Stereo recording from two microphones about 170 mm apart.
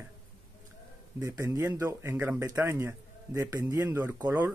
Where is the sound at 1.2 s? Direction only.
15° right (ahead or behind).